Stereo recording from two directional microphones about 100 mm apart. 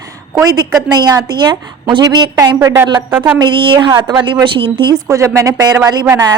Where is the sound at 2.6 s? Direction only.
30° right (ahead or behind).